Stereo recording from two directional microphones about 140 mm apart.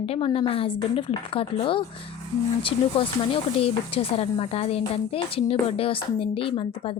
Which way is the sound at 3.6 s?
45° left (ahead or behind).